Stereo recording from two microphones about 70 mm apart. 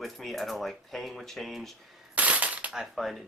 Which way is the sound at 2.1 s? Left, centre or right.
Right.